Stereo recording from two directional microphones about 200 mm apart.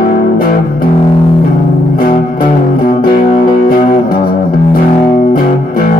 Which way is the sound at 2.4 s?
45° left (ahead or behind).